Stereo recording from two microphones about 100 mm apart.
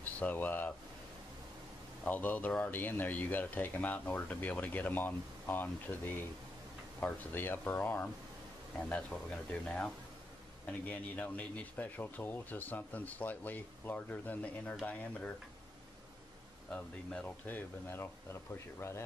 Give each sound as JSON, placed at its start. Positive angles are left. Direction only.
{"t": 0.0, "sound": "speech", "side_deg": 15}
{"t": 2.0, "sound": "speech", "side_deg": 15}
{"t": 16.7, "sound": "speech", "side_deg": 10}